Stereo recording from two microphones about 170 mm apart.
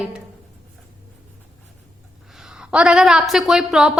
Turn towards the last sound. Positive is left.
turn(degrees=-5)  # may be behind; listen again after turning